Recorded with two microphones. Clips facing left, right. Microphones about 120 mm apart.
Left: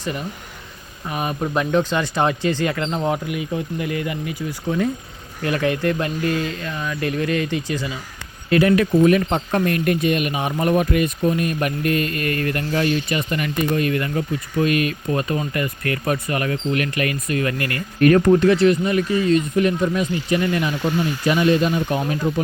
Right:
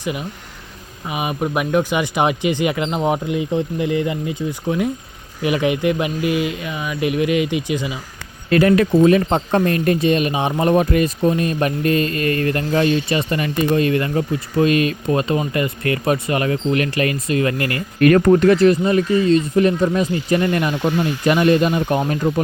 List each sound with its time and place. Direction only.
0.0 s speech: 10° right (ahead or behind)
8.5 s speech: 40° right (ahead or behind)
18.3 s speech: 45° right (ahead or behind)